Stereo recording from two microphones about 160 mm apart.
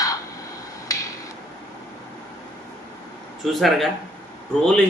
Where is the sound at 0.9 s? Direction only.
20° left (ahead or behind).